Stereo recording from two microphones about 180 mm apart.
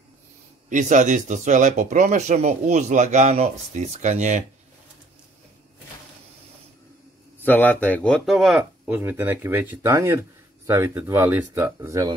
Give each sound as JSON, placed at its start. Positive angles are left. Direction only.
{"t": 0.7, "sound": "speech", "side_deg": -45}
{"t": 7.4, "sound": "speech", "side_deg": 10}